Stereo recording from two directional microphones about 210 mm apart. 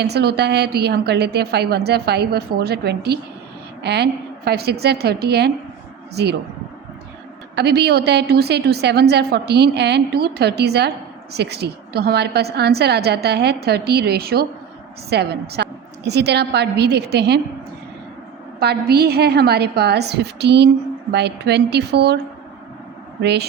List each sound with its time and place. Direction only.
0.0 s a woman's voice: 50° right (ahead or behind)
7.5 s a woman's voice: 50° right (ahead or behind)
18.6 s a woman's voice: 50° right (ahead or behind)
23.2 s a woman's voice: 55° right (ahead or behind)